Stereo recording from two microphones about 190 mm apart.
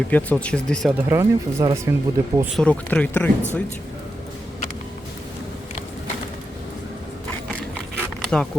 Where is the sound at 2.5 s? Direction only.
5° left (ahead or behind).